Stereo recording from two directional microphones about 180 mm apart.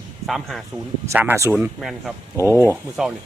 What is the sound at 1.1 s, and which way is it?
Speech, 15° right (ahead or behind).